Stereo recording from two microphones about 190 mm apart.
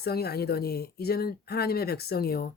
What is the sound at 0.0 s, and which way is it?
Speech, 55° left (ahead or behind).